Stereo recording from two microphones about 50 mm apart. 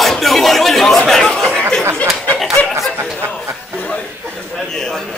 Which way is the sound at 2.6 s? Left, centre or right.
Left.